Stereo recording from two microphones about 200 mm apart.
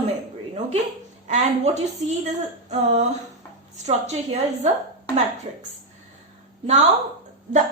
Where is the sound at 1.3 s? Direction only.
35° right (ahead or behind).